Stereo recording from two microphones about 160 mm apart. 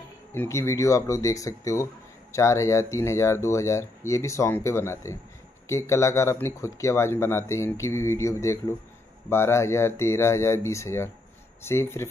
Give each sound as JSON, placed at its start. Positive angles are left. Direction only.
{"t": 0.3, "sound": "speech", "side_deg": 15}